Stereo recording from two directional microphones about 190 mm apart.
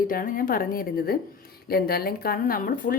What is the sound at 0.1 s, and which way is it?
A woman's voice, 50° left (ahead or behind).